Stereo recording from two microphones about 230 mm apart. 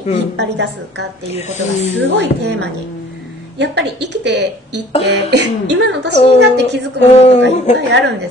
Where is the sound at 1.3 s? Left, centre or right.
Left.